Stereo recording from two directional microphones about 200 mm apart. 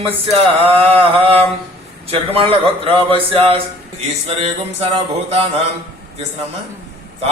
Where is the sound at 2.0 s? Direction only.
25° right (ahead or behind).